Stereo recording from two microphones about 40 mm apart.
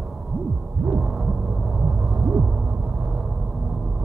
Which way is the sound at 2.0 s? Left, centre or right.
Right.